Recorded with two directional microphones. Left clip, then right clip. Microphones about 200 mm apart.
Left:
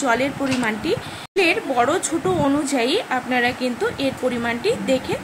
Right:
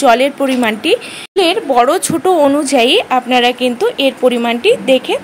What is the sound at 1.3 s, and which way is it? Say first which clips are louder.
Speech: right 7 dB; 30° right (ahead or behind).